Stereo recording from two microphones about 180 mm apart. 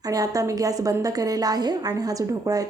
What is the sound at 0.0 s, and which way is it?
A woman's voice, 20° right (ahead or behind).